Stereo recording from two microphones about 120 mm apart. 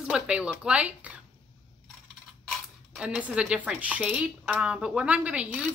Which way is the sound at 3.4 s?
10° right (ahead or behind).